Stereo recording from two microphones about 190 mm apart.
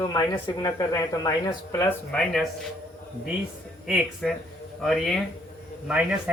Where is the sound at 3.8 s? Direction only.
5° right (ahead or behind).